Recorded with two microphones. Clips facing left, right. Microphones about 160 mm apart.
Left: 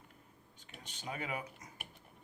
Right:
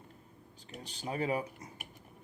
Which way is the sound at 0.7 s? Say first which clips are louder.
Right 6 dB; 35° right (ahead or behind).